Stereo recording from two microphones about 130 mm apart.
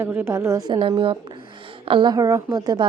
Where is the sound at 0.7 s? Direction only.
40° right (ahead or behind).